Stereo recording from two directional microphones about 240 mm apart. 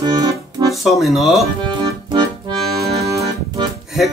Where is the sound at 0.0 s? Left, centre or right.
Centre.